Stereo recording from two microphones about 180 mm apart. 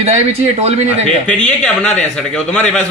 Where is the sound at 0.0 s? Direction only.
35° right (ahead or behind).